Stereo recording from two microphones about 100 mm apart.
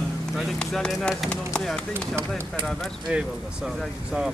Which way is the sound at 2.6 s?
5° right (ahead or behind).